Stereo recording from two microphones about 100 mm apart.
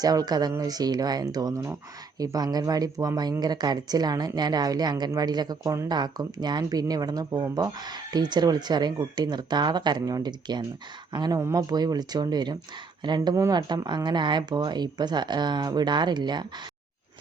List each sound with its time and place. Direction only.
0.0 s speech: 40° right (ahead or behind)
11.3 s speech: 30° right (ahead or behind)
11.6 s speech: 45° right (ahead or behind)
13.3 s speech: 30° right (ahead or behind)
13.6 s speech: 45° right (ahead or behind)